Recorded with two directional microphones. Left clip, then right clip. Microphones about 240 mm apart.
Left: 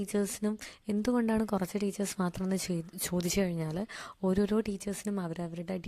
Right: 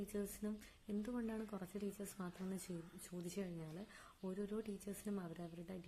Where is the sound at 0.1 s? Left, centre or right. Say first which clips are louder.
Left 14 dB; left.